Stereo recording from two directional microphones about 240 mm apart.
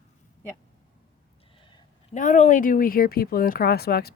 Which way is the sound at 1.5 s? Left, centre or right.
Left.